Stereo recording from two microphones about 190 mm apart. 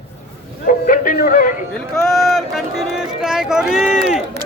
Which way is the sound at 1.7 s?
Centre (ahead or behind).